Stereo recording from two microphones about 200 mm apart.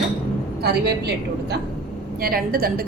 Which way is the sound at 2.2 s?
50° right (ahead or behind).